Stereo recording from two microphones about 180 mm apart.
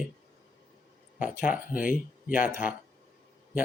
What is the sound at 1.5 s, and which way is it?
Speech, 50° left (ahead or behind).